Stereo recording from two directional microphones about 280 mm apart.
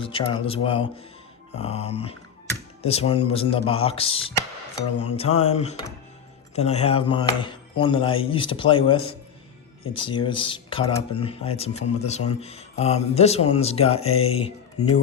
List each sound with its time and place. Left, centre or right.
0.0 s speech: centre